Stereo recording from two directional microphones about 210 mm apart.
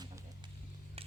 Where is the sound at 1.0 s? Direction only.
25° right (ahead or behind).